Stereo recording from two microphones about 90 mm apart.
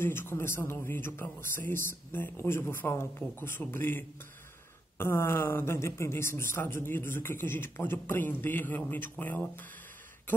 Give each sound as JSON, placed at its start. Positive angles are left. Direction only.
{"t": 0.0, "sound": "speech", "side_deg": 25}